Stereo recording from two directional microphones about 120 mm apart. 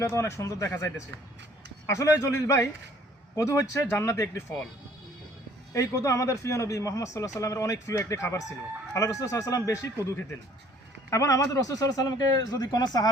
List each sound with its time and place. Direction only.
0.0 s a man's voice: 25° left (ahead or behind)
1.9 s a man's voice: 25° left (ahead or behind)
5.7 s a man's voice: 30° left (ahead or behind)
11.1 s a man's voice: 25° left (ahead or behind)